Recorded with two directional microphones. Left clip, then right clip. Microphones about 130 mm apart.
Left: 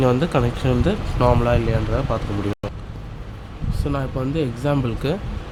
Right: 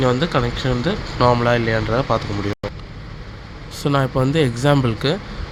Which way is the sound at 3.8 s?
25° right (ahead or behind).